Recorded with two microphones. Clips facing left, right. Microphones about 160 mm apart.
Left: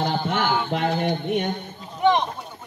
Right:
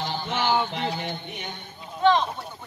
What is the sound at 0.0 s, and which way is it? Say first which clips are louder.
Music: left 4 dB; 55° left (ahead or behind).